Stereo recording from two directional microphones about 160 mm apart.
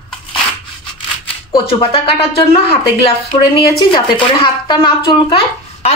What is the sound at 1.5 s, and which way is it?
A woman's voice, 35° left (ahead or behind).